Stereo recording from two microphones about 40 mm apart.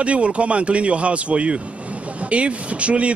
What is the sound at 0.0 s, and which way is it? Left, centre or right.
Speech, right.